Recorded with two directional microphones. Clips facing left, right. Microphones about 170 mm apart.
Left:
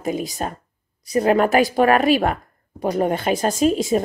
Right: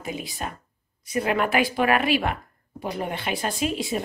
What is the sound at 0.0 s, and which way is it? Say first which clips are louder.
Speech: left 8 dB; 45° left (ahead or behind).